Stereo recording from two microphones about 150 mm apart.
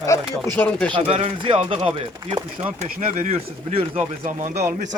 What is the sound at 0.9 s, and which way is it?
Speech, 40° right (ahead or behind).